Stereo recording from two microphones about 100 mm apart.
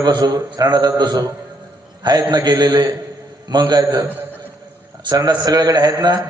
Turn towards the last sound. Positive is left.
turn(degrees=-45)  # may be behind; listen again after turning